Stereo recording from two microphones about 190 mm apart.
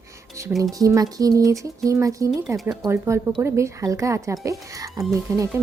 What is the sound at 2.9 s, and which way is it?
Speech, 15° right (ahead or behind).